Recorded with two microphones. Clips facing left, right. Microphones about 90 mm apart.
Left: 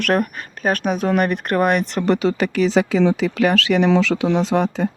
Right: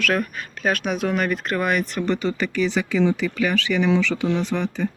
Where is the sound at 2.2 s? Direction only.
90° left.